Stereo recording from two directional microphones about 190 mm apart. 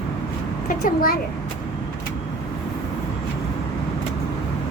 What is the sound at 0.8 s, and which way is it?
Speech, 50° left (ahead or behind).